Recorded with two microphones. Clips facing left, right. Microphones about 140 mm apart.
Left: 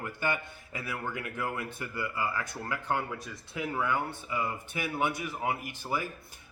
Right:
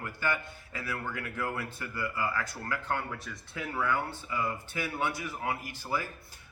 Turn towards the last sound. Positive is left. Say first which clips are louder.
# left 1 dB
turn(degrees=20)  # may be behind; listen again after turning